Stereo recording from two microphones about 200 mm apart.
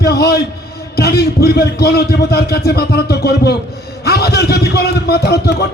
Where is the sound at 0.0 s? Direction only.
50° left (ahead or behind).